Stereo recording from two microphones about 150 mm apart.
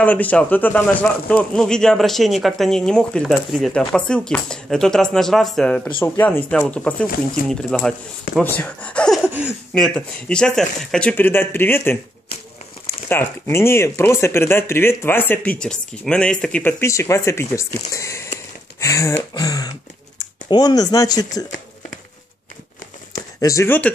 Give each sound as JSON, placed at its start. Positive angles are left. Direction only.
{"t": 0.0, "sound": "speech", "side_deg": 10}
{"t": 7.4, "sound": "speech", "side_deg": 70}
{"t": 7.7, "sound": "speech", "side_deg": 5}
{"t": 9.2, "sound": "speech", "side_deg": -5}
{"t": 9.8, "sound": "speech", "side_deg": 5}
{"t": 13.1, "sound": "speech", "side_deg": 15}
{"t": 16.8, "sound": "speech", "side_deg": 20}
{"t": 18.8, "sound": "a sound", "side_deg": 20}
{"t": 19.3, "sound": "speech", "side_deg": 25}
{"t": 23.1, "sound": "a sound", "side_deg": 20}